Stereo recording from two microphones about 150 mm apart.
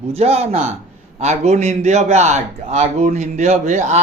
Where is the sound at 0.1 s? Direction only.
45° right (ahead or behind).